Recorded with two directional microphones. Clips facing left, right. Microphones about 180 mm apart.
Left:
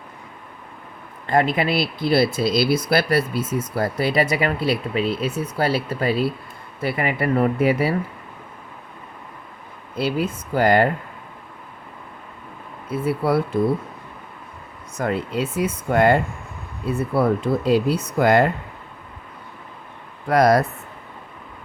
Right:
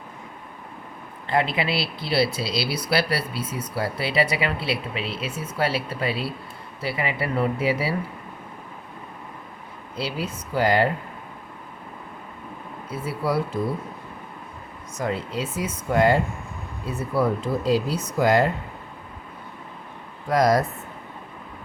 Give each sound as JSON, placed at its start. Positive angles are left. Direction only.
{"t": 1.3, "sound": "speech", "side_deg": 45}
{"t": 10.0, "sound": "speech", "side_deg": 50}
{"t": 12.9, "sound": "speech", "side_deg": 60}
{"t": 14.9, "sound": "speech", "side_deg": 60}
{"t": 20.2, "sound": "speech", "side_deg": 65}